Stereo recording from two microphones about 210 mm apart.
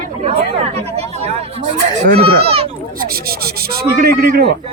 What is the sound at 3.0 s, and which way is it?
Rub, 45° right (ahead or behind).